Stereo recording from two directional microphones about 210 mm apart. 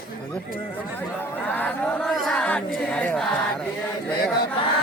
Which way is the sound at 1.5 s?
10° left (ahead or behind).